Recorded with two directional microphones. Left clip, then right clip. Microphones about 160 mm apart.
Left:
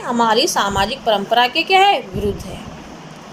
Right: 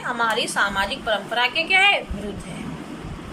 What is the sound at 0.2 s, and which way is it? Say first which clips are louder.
A woman's voice: left 6 dB; 40° left (ahead or behind).